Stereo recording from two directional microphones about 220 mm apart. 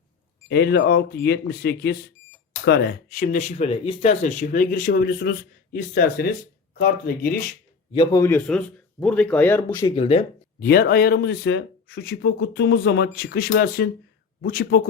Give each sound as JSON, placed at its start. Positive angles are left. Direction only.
{"t": 0.4, "sound": "speech", "side_deg": 45}
{"t": 7.9, "sound": "speech", "side_deg": 15}
{"t": 9.9, "sound": "speech", "side_deg": 25}
{"t": 10.6, "sound": "speech", "side_deg": 45}